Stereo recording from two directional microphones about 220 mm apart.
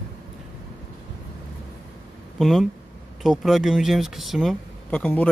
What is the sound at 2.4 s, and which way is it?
Speech, centre (ahead or behind).